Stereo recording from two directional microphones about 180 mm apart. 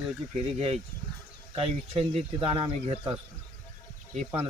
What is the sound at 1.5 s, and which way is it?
Speech, 30° right (ahead or behind).